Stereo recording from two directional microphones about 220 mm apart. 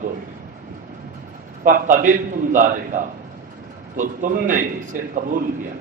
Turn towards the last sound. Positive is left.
turn(degrees=-35)  # may be behind; listen again after turning